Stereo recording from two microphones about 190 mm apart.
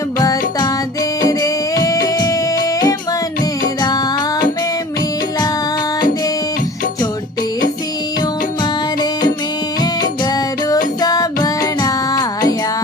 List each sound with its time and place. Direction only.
0.2 s music: 20° left (ahead or behind)
8.6 s music: 20° left (ahead or behind)